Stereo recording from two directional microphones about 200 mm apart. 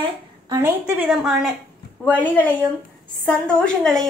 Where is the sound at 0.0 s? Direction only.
15° right (ahead or behind).